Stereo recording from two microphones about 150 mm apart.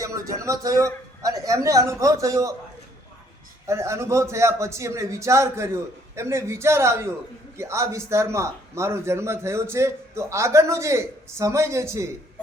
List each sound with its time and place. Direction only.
0.0 s a man's voice: 20° right (ahead or behind)
3.7 s a man's voice: 20° right (ahead or behind)